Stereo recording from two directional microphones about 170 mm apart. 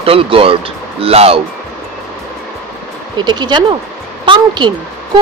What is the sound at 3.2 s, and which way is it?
Speech, 25° right (ahead or behind).